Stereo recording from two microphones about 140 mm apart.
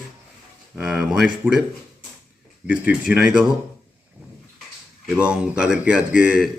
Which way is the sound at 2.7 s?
10° right (ahead or behind).